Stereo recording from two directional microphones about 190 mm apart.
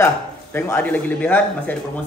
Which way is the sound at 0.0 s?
15° left (ahead or behind).